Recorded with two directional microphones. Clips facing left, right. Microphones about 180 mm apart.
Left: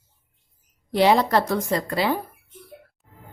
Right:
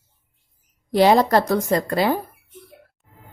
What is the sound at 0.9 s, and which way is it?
A woman's voice, 40° right (ahead or behind).